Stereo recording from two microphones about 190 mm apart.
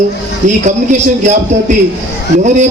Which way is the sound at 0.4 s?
40° right (ahead or behind).